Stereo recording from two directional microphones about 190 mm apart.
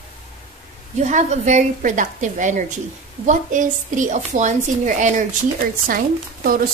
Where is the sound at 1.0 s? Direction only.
40° right (ahead or behind).